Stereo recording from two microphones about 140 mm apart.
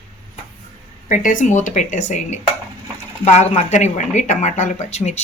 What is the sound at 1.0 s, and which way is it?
Speech, 70° left (ahead or behind).